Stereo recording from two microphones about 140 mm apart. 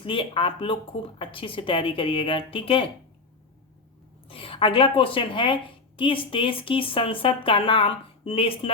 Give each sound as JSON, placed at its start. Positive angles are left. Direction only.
{"t": 0.0, "sound": "a woman's voice", "side_deg": 40}
{"t": 4.3, "sound": "a woman's voice", "side_deg": 40}